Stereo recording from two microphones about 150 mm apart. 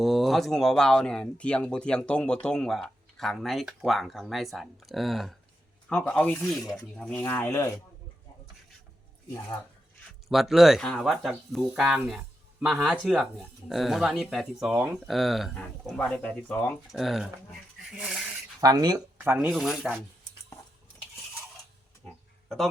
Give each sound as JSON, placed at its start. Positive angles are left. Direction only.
{"t": 0.0, "sound": "speech", "side_deg": 0}
{"t": 10.2, "sound": "speech", "side_deg": 0}
{"t": 18.6, "sound": "speech", "side_deg": -25}
{"t": 19.2, "sound": "speech", "side_deg": -10}
{"t": 22.0, "sound": "a sound", "side_deg": 0}